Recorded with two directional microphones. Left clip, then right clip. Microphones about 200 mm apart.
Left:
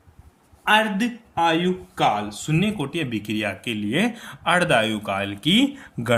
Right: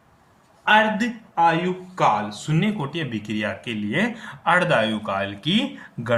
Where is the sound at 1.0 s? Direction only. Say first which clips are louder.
Right 2 dB; 40° left (ahead or behind).